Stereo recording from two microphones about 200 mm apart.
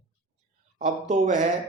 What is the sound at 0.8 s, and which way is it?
Speech, 35° right (ahead or behind).